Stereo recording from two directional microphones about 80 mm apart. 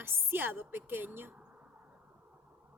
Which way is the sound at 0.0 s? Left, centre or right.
Right.